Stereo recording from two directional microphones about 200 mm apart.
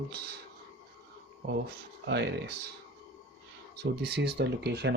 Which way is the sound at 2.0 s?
55° right (ahead or behind).